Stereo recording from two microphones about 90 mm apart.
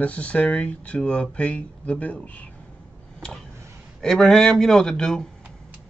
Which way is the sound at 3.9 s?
5° left (ahead or behind).